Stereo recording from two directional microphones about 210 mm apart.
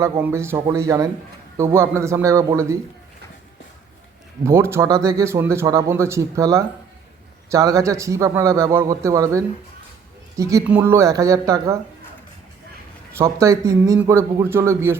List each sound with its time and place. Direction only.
0.0 s speech: 10° right (ahead or behind)
4.4 s speech: 10° right (ahead or behind)
13.1 s speech: 15° right (ahead or behind)